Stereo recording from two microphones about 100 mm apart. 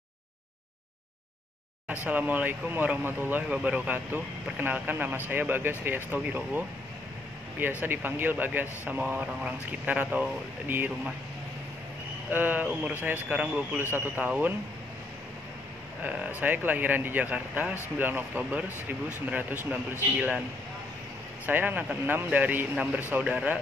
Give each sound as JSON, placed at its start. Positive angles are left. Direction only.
{"t": 2.0, "sound": "speech", "side_deg": -15}
{"t": 7.8, "sound": "speech", "side_deg": -20}
{"t": 12.3, "sound": "speech", "side_deg": -20}
{"t": 16.0, "sound": "speech", "side_deg": -15}
{"t": 21.5, "sound": "speech", "side_deg": -20}